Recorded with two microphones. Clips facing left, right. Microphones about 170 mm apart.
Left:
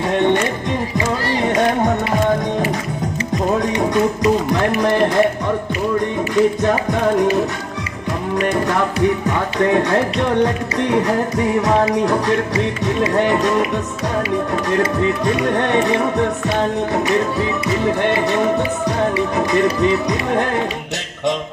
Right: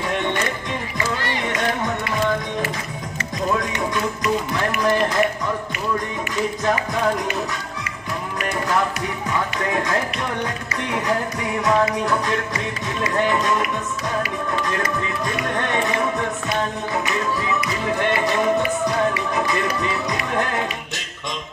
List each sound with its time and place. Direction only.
3.5 s music: 35° left (ahead or behind)
6.7 s music: 35° left (ahead or behind)
11.7 s music: 35° left (ahead or behind)
13.1 s speech: 60° left (ahead or behind)
15.5 s speech: 60° left (ahead or behind)
19.3 s speech: 60° left (ahead or behind)